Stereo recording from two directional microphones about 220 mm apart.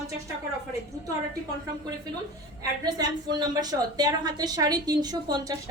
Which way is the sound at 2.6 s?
20° right (ahead or behind).